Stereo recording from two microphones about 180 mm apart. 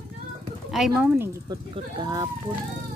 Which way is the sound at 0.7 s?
Centre (ahead or behind).